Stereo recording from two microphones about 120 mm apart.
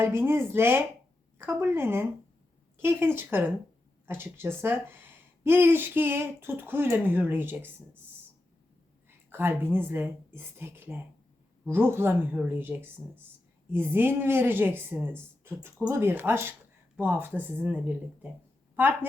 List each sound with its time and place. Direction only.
0.0 s speech: 20° right (ahead or behind)
9.0 s speech: 20° right (ahead or behind)